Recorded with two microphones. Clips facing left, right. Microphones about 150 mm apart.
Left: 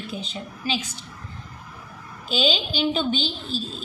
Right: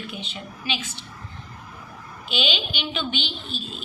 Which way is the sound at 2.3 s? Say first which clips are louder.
Left 4 dB; 40° left (ahead or behind).